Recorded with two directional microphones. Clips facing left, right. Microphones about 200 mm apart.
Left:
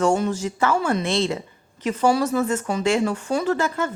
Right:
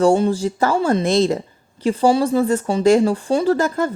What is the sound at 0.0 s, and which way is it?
Speech, 35° right (ahead or behind).